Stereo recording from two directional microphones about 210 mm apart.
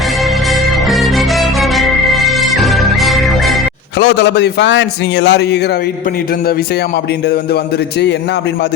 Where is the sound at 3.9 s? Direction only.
55° left (ahead or behind).